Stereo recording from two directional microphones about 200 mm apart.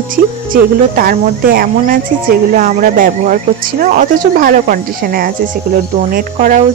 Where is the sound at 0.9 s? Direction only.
45° right (ahead or behind).